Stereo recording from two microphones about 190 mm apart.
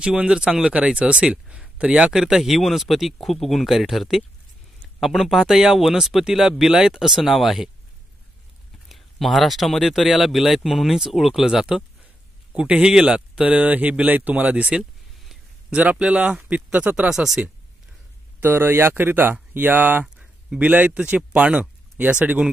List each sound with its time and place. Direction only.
0.0 s speech: 5° right (ahead or behind)
8.8 s speech: centre (ahead or behind)